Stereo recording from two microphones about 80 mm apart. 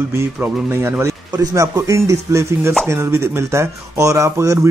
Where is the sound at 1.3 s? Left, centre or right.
Right.